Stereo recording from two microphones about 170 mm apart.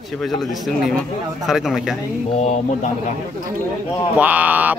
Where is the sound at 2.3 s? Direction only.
40° left (ahead or behind).